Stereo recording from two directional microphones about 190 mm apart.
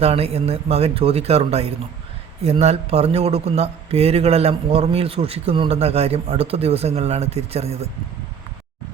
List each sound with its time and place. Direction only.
0.0 s a man's voice: 30° right (ahead or behind)